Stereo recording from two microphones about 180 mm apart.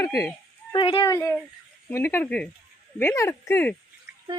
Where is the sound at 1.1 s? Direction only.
15° left (ahead or behind).